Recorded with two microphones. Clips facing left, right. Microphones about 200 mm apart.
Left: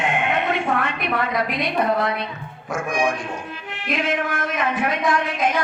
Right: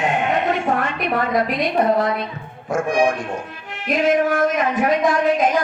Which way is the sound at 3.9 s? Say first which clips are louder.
Right 7 dB; 45° right (ahead or behind).